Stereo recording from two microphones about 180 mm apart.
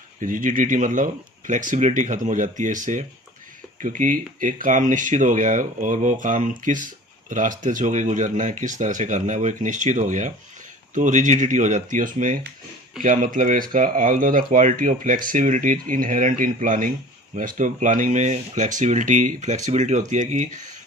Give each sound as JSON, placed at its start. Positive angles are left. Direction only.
{"t": 0.2, "sound": "speech", "side_deg": -50}